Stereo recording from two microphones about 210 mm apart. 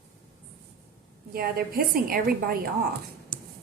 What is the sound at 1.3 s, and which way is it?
A woman's voice, 45° right (ahead or behind).